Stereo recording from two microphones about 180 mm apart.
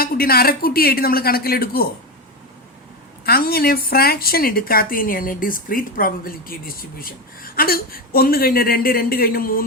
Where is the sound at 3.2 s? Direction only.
60° left (ahead or behind).